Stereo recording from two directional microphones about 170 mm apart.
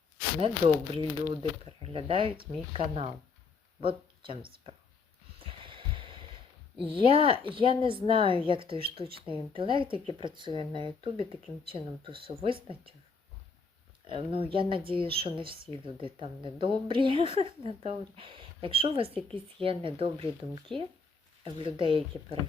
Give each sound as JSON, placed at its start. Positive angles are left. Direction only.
{"t": 0.3, "sound": "a woman's voice", "side_deg": -30}
{"t": 5.4, "sound": "a sound", "side_deg": -30}
{"t": 6.8, "sound": "a woman's voice", "side_deg": -30}
{"t": 14.1, "sound": "a woman's voice", "side_deg": -30}
{"t": 21.4, "sound": "a woman's voice", "side_deg": -30}